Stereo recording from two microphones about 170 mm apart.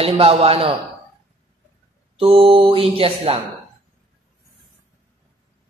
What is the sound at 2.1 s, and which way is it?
Speech, 35° right (ahead or behind).